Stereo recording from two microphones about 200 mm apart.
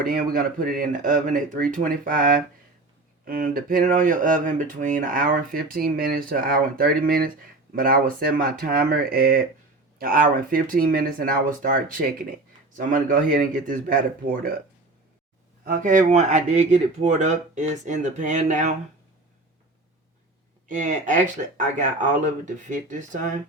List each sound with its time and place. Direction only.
0.1 s speech: 45° right (ahead or behind)
15.6 s speech: 40° right (ahead or behind)
20.7 s speech: 40° right (ahead or behind)